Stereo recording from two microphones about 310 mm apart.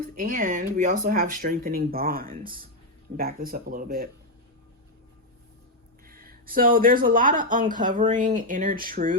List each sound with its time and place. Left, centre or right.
0.2 s speech: right
6.1 s speech: right